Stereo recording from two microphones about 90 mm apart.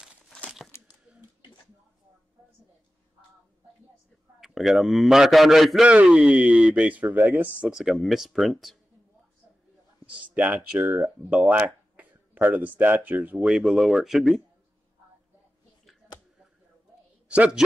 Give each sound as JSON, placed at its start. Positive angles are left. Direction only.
{"t": 0.7, "sound": "a sound", "side_deg": 25}
{"t": 4.4, "sound": "a man's voice", "side_deg": 0}
{"t": 5.9, "sound": "speech", "side_deg": -15}
{"t": 7.6, "sound": "a man's voice", "side_deg": -5}
{"t": 10.0, "sound": "speech", "side_deg": -15}
{"t": 13.4, "sound": "a man's voice", "side_deg": -5}
{"t": 17.3, "sound": "a woman's voice", "side_deg": -10}